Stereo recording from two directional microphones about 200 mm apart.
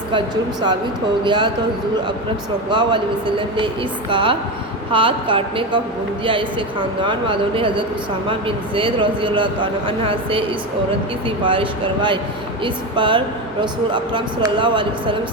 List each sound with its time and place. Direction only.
1.2 s a woman's voice: 25° right (ahead or behind)
2.6 s a woman's voice: 25° right (ahead or behind)
11.4 s a woman's voice: 25° right (ahead or behind)